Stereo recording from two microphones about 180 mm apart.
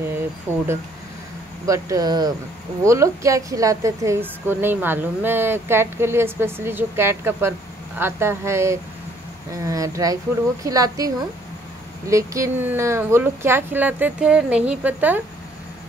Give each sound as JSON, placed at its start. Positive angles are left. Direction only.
{"t": 0.5, "sound": "a woman's voice", "side_deg": -15}
{"t": 1.7, "sound": "a woman's voice", "side_deg": -20}
{"t": 12.1, "sound": "a woman's voice", "side_deg": -15}